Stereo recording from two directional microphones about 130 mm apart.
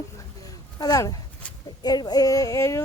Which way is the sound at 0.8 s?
30° left (ahead or behind).